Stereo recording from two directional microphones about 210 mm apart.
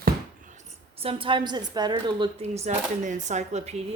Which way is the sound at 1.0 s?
25° right (ahead or behind).